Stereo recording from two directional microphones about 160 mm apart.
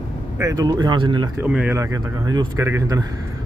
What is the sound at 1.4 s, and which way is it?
Speech, 10° right (ahead or behind).